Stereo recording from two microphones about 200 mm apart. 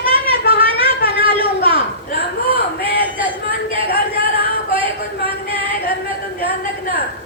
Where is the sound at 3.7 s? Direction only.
25° right (ahead or behind).